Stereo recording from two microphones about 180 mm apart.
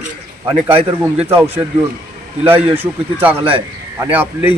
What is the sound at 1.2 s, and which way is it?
Speech, 35° right (ahead or behind).